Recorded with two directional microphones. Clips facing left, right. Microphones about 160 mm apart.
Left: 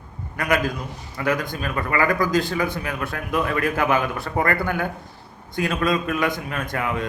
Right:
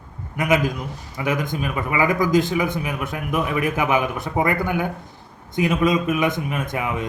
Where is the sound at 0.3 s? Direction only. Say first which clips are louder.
Right 2 dB; 20° right (ahead or behind).